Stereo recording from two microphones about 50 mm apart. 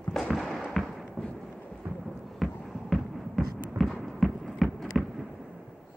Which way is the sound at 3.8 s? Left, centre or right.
Centre.